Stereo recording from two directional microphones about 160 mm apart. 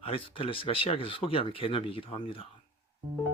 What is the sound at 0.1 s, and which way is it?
Speech, 35° left (ahead or behind).